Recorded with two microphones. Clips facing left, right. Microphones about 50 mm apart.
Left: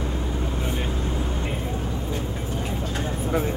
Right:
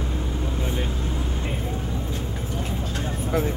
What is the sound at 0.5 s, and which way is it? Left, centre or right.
Vehicle, left.